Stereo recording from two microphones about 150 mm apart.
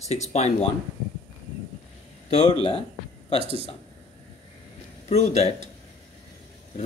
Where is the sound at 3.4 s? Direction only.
40° right (ahead or behind).